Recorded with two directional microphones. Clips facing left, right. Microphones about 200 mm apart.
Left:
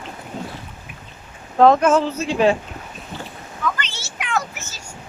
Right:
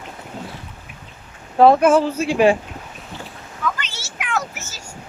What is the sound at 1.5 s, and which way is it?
Speech, 10° right (ahead or behind).